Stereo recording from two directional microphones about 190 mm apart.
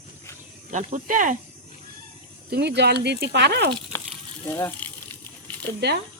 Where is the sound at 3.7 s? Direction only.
5° left (ahead or behind).